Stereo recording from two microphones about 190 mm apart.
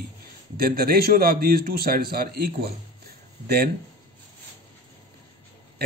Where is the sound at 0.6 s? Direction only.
50° right (ahead or behind).